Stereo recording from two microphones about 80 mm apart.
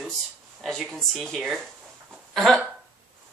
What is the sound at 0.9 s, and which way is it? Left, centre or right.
Speech, centre.